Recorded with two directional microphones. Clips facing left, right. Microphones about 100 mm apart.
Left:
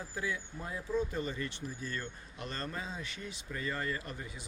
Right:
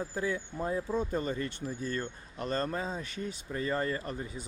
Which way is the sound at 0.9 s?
45° right (ahead or behind).